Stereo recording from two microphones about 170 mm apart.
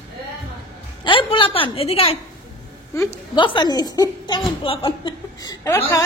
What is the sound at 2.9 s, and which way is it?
A woman's voice, 15° left (ahead or behind).